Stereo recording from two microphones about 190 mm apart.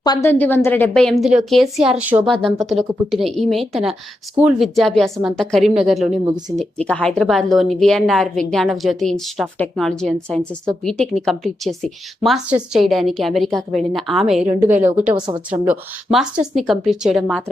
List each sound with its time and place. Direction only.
0.0 s a woman's voice: 20° left (ahead or behind)
0.3 s a woman's voice: 10° left (ahead or behind)